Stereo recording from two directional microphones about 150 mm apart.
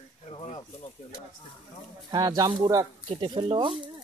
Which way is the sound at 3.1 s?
35° right (ahead or behind).